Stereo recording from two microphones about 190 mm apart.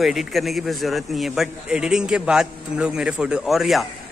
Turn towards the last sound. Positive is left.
turn(degrees=0)  # may be behind; listen again after turning